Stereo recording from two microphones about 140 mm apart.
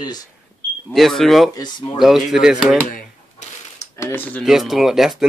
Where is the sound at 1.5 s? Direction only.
30° left (ahead or behind).